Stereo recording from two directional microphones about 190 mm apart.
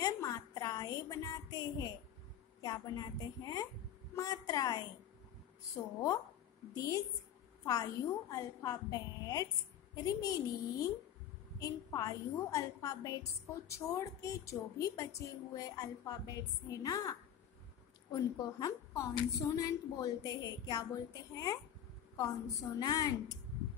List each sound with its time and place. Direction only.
0.0 s a sound: 20° left (ahead or behind)
2.6 s a woman's voice: 20° left (ahead or behind)
6.7 s a woman's voice: 20° left (ahead or behind)
11.6 s a woman's voice: 20° left (ahead or behind)